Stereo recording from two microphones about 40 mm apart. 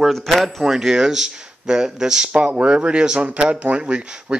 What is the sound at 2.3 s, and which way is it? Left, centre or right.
Speech, right.